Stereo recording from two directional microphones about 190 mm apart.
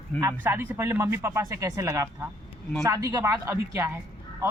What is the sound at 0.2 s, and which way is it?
Speech, 15° right (ahead or behind).